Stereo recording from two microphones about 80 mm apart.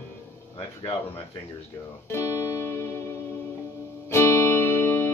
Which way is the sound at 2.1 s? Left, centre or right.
Left.